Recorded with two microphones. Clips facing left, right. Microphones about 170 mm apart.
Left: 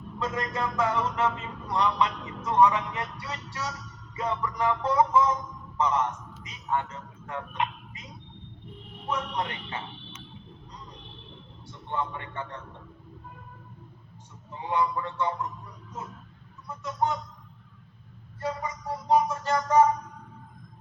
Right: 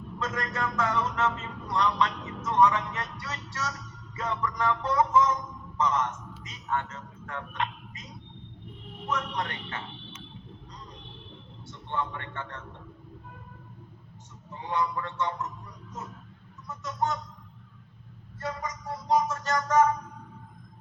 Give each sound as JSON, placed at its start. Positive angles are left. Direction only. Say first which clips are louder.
{"t": 0.2, "sound": "a man's voice", "louder": "left 2 dB", "side_deg": 15}
{"t": 9.0, "sound": "a man's voice", "louder": "left 1 dB", "side_deg": 15}
{"t": 11.9, "sound": "a man's voice", "louder": "left 1 dB", "side_deg": 15}
{"t": 14.7, "sound": "a man's voice", "louder": "left 2 dB", "side_deg": 15}
{"t": 16.6, "sound": "honk", "louder": "left 2 dB", "side_deg": 15}
{"t": 18.3, "sound": "a man's voice", "louder": "left 3 dB", "side_deg": 15}